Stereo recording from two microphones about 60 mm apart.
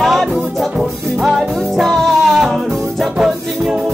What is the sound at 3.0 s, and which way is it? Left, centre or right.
Music, centre.